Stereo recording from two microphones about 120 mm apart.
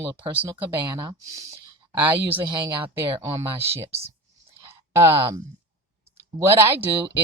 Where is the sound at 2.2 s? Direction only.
45° right (ahead or behind).